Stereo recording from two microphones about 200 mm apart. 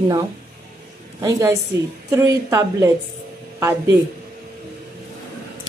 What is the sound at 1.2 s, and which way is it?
A woman's voice, 15° right (ahead or behind).